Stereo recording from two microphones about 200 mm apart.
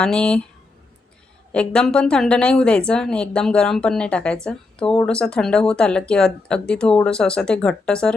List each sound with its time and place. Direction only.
0.0 s speech: 5° left (ahead or behind)
1.5 s speech: 5° left (ahead or behind)